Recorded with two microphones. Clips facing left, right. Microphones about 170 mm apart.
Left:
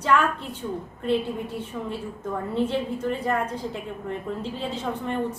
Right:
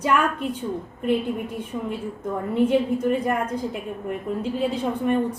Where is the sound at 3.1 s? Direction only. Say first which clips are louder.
Right 3 dB; 15° right (ahead or behind).